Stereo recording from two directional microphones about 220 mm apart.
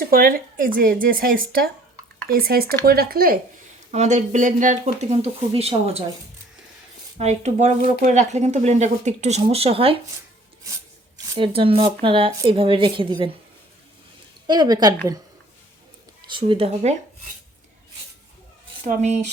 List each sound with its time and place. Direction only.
0.0 s speech: 40° right (ahead or behind)
3.9 s speech: 30° right (ahead or behind)
7.2 s speech: 30° right (ahead or behind)
11.3 s speech: 25° right (ahead or behind)
14.4 s speech: 20° right (ahead or behind)
16.3 s speech: 25° right (ahead or behind)
18.9 s speech: 30° right (ahead or behind)